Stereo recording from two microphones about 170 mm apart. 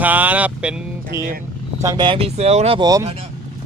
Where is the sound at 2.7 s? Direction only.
20° right (ahead or behind).